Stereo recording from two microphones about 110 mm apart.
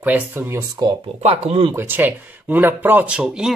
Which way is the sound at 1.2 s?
70° right (ahead or behind).